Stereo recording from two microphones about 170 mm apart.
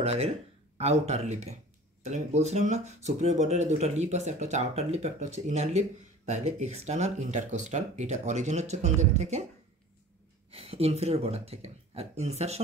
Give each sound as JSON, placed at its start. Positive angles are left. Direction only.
{"t": 0.0, "sound": "speech", "side_deg": -40}
{"t": 10.5, "sound": "speech", "side_deg": -35}